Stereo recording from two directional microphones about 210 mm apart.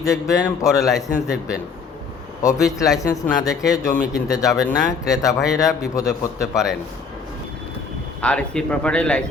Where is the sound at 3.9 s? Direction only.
15° left (ahead or behind).